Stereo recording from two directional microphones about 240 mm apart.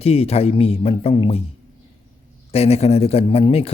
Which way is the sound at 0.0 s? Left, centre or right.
Left.